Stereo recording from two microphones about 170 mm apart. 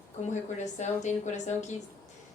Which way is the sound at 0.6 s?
45° left (ahead or behind).